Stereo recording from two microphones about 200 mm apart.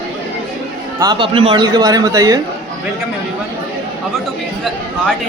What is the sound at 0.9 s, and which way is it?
A man's voice, 20° right (ahead or behind).